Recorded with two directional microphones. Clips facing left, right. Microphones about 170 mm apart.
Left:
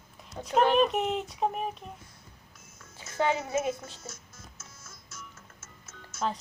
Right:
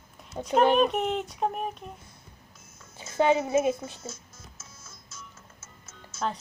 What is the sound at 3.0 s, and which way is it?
A child's voice, 20° right (ahead or behind).